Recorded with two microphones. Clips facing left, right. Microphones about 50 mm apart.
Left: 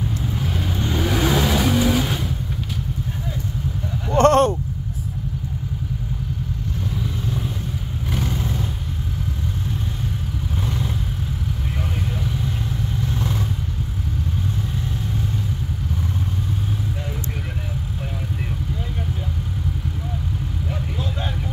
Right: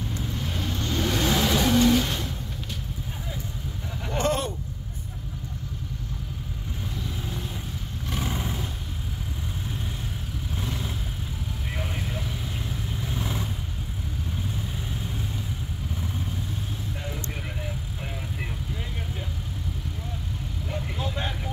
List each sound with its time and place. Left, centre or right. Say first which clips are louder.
0.1 s vehicle: left 6 dB; centre
4.2 s a sound: left 12 dB; left
8.3 s vehicle: left 5 dB; centre
13.0 s vehicle: left 5 dB; centre